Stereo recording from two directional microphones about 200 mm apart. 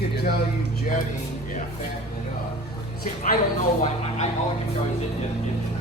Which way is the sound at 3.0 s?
40° left (ahead or behind).